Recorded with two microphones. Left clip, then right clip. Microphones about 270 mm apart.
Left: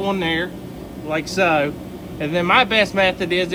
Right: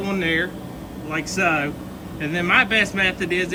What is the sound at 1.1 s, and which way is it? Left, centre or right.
A man's voice, centre.